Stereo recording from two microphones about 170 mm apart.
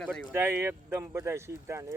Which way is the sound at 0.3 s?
10° right (ahead or behind).